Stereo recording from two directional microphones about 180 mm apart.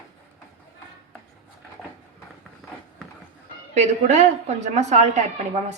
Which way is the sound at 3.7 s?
40° right (ahead or behind).